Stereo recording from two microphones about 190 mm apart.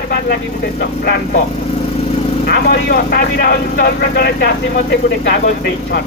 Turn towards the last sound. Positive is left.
turn(degrees=60)  # may be behind; listen again after turning